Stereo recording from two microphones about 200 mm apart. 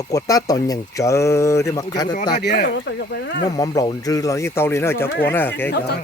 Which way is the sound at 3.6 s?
20° left (ahead or behind).